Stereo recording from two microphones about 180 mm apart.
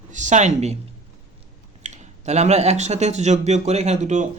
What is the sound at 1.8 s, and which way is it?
Speech, 40° right (ahead or behind).